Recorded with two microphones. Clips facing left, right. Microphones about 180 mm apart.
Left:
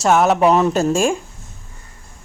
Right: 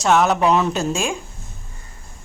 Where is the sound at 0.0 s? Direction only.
5° left (ahead or behind).